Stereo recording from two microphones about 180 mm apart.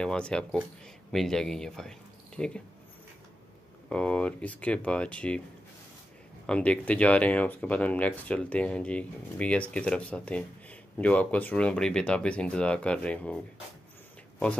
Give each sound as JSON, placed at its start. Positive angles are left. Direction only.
{"t": 0.0, "sound": "speech", "side_deg": 5}
{"t": 3.9, "sound": "speech", "side_deg": 5}
{"t": 6.4, "sound": "speech", "side_deg": 5}